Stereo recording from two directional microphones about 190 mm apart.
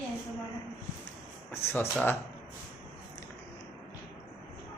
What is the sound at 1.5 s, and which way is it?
Speech, 15° left (ahead or behind).